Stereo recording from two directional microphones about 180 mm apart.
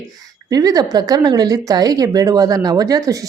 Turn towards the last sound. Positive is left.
turn(degrees=-20)  # may be behind; listen again after turning